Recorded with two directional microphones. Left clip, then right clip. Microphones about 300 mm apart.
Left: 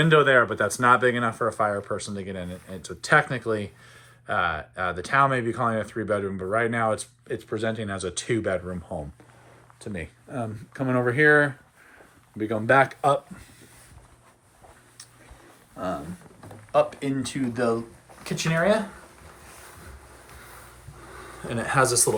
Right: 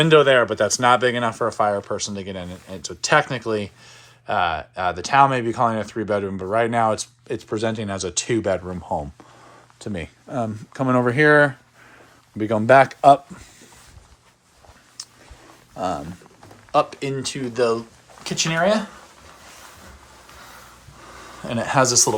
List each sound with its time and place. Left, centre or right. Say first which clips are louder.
0.0 s speech: right 4 dB; centre
9.8 s speech: right 5 dB; right
15.0 s a sound: right 12 dB; centre
16.7 s speech: right 2 dB; centre
21.4 s speech: right 4 dB; centre